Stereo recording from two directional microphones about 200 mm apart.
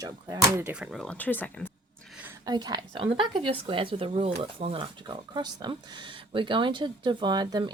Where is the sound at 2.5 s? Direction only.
20° right (ahead or behind).